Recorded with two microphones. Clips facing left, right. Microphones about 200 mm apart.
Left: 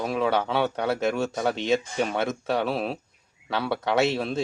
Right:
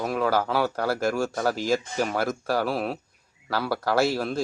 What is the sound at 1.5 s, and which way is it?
Speech, 25° left (ahead or behind).